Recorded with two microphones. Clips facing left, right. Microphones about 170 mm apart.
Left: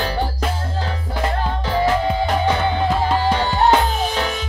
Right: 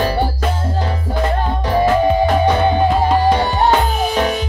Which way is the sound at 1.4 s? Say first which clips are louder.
Right 3 dB; 15° right (ahead or behind).